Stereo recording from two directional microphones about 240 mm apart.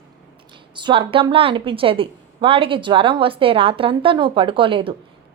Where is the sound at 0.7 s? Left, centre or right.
Centre.